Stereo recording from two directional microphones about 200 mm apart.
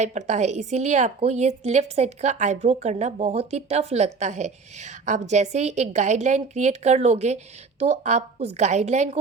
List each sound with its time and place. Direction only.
0.0 s a woman's voice: 35° right (ahead or behind)